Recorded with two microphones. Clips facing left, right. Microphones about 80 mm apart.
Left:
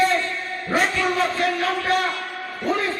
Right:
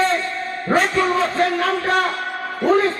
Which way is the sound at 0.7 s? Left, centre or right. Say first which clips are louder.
Right 4 dB; right.